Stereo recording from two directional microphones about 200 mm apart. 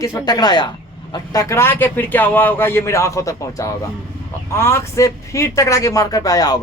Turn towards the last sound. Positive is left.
turn(degrees=20)  # may be behind; listen again after turning